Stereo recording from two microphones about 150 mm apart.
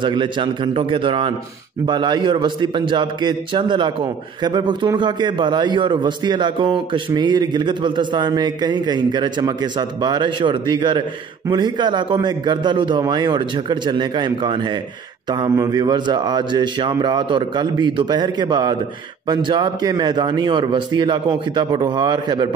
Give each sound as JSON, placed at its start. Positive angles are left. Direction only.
{"t": 0.0, "sound": "a man's voice", "side_deg": -30}